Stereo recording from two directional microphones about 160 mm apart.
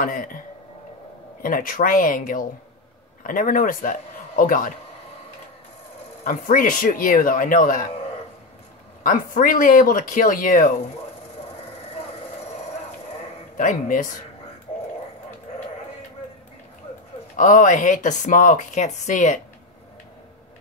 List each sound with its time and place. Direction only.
0.0 s speech: 60° left (ahead or behind)
1.4 s speech: 60° left (ahead or behind)
6.2 s speech: 60° left (ahead or behind)
9.0 s speech: 60° left (ahead or behind)
13.6 s speech: 55° left (ahead or behind)
17.4 s speech: 55° left (ahead or behind)